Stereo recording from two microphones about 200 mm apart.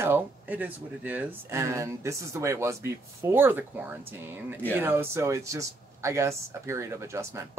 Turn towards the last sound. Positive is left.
turn(degrees=-15)  # may be behind; listen again after turning